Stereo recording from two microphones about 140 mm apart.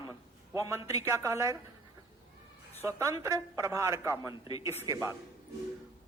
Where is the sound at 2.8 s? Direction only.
20° right (ahead or behind).